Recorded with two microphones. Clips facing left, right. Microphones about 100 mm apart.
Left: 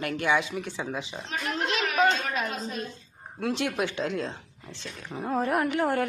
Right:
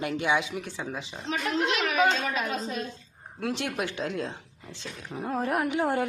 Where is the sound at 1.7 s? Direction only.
Centre (ahead or behind).